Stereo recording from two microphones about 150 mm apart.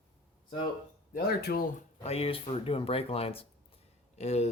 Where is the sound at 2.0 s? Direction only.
40° left (ahead or behind).